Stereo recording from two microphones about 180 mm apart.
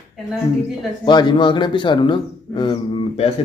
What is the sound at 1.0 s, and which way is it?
A man's voice, 25° left (ahead or behind).